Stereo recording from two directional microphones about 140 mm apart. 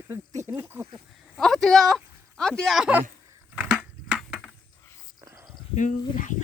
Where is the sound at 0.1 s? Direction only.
20° right (ahead or behind).